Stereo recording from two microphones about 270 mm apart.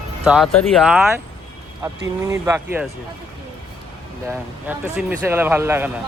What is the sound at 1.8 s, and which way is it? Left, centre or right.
Speech, centre.